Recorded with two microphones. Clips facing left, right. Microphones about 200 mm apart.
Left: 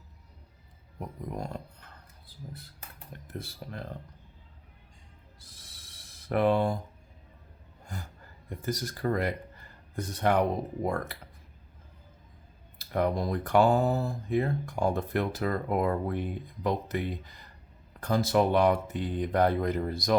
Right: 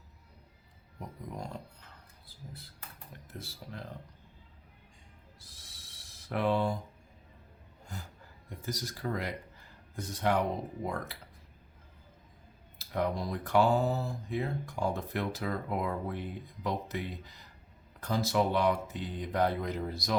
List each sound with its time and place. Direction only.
0.9 s speech: 55° left (ahead or behind)
3.3 s speech: 55° left (ahead or behind)
5.7 s a sound: 55° left (ahead or behind)
8.4 s speech: 55° left (ahead or behind)
12.9 s speech: 55° left (ahead or behind)